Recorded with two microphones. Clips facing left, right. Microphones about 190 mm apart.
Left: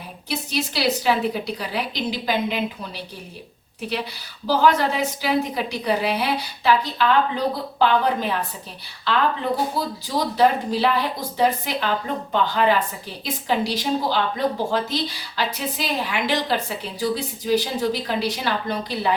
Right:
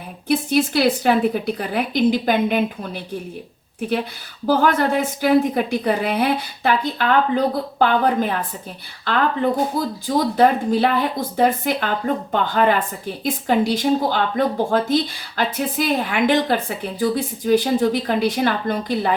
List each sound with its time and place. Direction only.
0.3 s a woman's voice: 50° right (ahead or behind)